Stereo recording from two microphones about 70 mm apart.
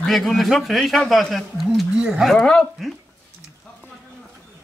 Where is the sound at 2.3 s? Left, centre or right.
Centre.